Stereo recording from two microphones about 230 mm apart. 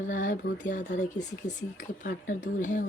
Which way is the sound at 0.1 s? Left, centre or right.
Left.